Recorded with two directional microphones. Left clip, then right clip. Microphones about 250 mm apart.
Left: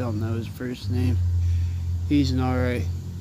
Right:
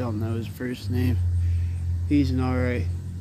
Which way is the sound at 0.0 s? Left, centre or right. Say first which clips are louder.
Even; centre.